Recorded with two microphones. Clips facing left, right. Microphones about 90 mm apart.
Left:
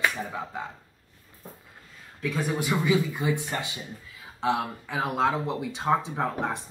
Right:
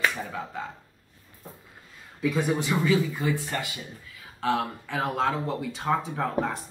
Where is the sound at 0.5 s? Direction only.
15° left (ahead or behind).